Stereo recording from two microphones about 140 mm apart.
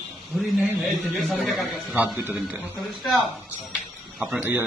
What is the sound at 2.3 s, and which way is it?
Speech, 15° right (ahead or behind).